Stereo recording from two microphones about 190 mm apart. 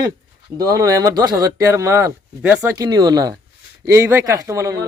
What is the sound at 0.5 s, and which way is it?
Speech, 20° right (ahead or behind).